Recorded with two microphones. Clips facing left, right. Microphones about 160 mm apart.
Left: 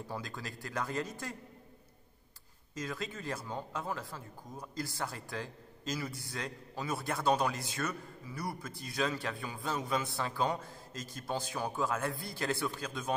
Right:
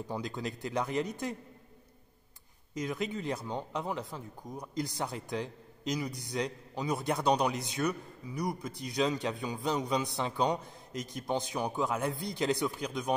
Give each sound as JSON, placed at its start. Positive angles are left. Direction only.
{"t": 0.1, "sound": "speech", "side_deg": -20}
{"t": 2.7, "sound": "speech", "side_deg": -20}